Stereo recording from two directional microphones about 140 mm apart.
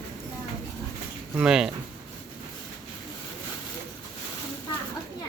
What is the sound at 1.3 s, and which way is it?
Speech, 5° right (ahead or behind).